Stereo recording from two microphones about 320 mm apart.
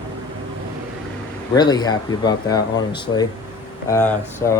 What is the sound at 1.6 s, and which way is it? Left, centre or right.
Speech, centre.